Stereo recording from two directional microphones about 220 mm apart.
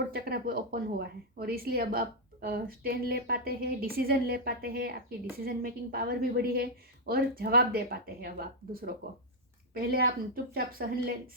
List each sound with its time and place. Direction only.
0.1 s a woman's voice: 45° right (ahead or behind)